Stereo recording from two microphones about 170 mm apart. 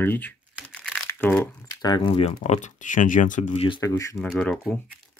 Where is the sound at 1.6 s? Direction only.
25° left (ahead or behind); by 3.7 s 50° left (ahead or behind).